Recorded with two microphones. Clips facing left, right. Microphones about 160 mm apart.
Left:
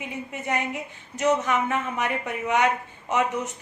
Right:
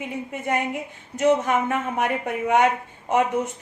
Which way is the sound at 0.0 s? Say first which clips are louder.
Right 3 dB; 50° right (ahead or behind).